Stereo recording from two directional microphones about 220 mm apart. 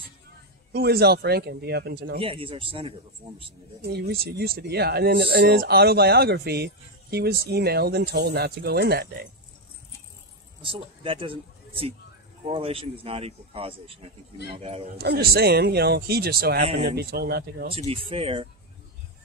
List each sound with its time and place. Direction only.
0.7 s speech: 45° right (ahead or behind)
2.1 s a man's voice: 25° right (ahead or behind)
3.8 s speech: 45° right (ahead or behind)
10.6 s a man's voice: 25° right (ahead or behind)
15.0 s speech: 45° right (ahead or behind)
17.6 s a man's voice: 25° right (ahead or behind)